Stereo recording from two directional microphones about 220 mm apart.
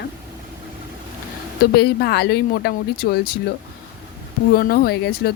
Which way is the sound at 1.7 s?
45° left (ahead or behind).